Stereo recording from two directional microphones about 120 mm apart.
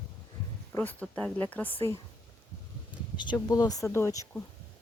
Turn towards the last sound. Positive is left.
turn(degrees=25)  # may be behind; listen again after turning